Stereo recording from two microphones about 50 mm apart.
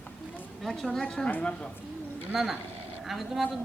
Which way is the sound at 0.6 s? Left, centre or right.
Centre.